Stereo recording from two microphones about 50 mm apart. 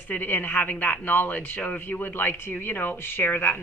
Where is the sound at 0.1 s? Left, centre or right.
Left.